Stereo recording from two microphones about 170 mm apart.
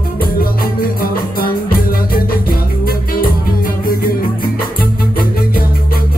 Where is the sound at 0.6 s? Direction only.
60° left (ahead or behind).